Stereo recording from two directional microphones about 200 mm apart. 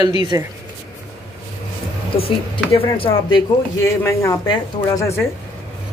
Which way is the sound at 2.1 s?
25° left (ahead or behind).